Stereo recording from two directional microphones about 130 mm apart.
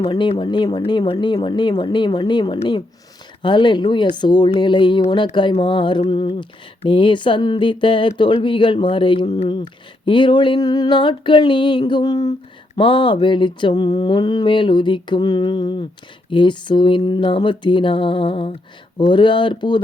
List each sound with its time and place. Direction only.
0.1 s speech: 35° left (ahead or behind)